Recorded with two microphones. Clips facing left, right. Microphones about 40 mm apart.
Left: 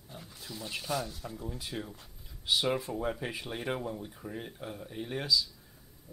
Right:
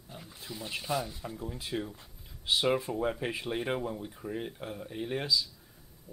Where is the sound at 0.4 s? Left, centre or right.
Centre.